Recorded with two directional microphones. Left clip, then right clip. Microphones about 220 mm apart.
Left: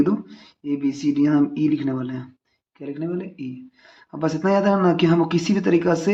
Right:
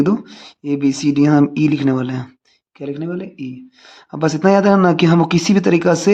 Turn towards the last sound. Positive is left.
turn(degrees=-40)  # may be behind; listen again after turning